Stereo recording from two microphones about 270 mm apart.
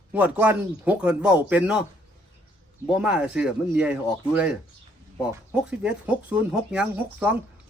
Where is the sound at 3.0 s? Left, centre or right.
Centre.